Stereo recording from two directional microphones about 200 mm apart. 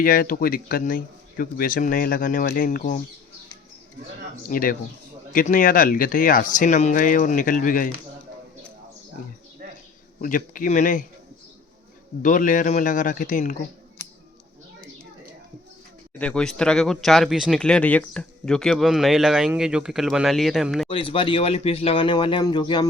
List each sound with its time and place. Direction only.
0.0 s speech: 45° left (ahead or behind)
4.4 s speech: 45° left (ahead or behind)
9.6 s a sound: 50° right (ahead or behind)
10.2 s speech: 40° left (ahead or behind)
12.2 s speech: 40° left (ahead or behind)
16.1 s speech: 5° left (ahead or behind)
20.9 s speech: 25° left (ahead or behind)